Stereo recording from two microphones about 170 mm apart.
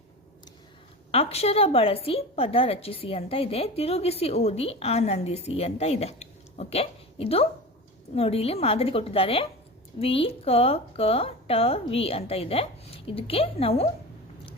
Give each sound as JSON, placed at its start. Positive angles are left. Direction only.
{"t": 1.1, "sound": "a woman's voice", "side_deg": 35}